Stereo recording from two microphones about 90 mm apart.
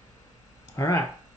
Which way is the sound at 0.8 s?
35° left (ahead or behind).